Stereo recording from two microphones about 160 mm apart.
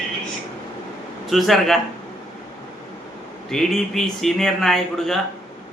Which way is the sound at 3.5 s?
Centre (ahead or behind).